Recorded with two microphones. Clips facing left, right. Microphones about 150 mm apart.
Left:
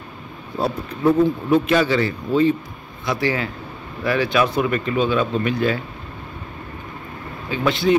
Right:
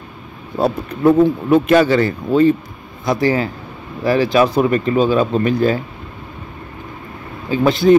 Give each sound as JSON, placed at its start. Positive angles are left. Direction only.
{"t": 0.6, "sound": "speech", "side_deg": -60}
{"t": 7.5, "sound": "speech", "side_deg": -40}